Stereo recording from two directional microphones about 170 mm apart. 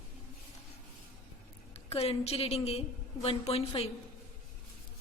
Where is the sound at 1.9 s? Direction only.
35° left (ahead or behind).